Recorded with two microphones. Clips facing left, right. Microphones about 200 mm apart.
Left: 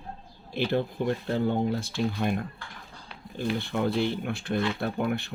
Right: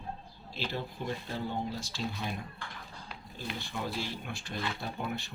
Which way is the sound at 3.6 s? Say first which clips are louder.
Left 10 dB; 60° left (ahead or behind).